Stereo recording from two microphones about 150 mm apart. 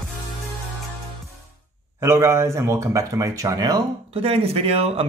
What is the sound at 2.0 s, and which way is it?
A man's voice, 15° right (ahead or behind).